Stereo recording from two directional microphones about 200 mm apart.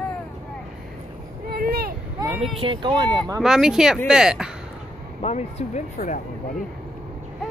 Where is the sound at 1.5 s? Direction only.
50° right (ahead or behind).